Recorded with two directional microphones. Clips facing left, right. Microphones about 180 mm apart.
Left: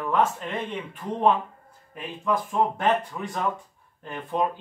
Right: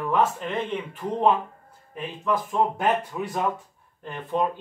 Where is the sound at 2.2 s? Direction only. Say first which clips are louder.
Even; 10° right (ahead or behind).